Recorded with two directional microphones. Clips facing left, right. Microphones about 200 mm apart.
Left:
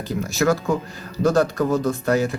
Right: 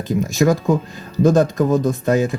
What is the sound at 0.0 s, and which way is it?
Speech, 20° right (ahead or behind).